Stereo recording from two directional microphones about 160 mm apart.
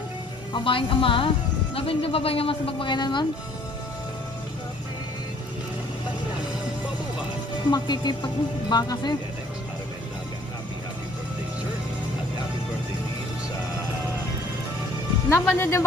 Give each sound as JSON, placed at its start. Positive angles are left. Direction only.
{"t": 0.5, "sound": "speech", "side_deg": 30}
{"t": 7.7, "sound": "speech", "side_deg": 25}
{"t": 15.2, "sound": "speech", "side_deg": 10}